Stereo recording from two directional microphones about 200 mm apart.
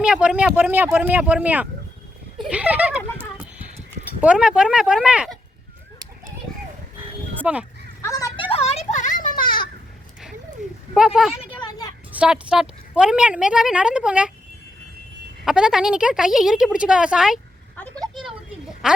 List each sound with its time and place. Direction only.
0.0 s speech: 5° right (ahead or behind)
4.2 s a woman's voice: 5° right (ahead or behind)
7.4 s a woman's voice: 5° right (ahead or behind)
8.0 s children playing: 15° left (ahead or behind); by 9.6 s 45° left (ahead or behind)
10.9 s a woman's voice: 5° right (ahead or behind)
11.3 s a sound: 20° left (ahead or behind)
12.1 s a woman's voice: 5° right (ahead or behind)
15.4 s a woman's voice: 5° right (ahead or behind)
18.1 s a sound: centre (ahead or behind)
18.8 s speech: 5° right (ahead or behind)